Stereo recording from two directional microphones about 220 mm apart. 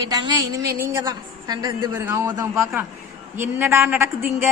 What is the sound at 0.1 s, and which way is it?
A woman's voice, 20° right (ahead or behind).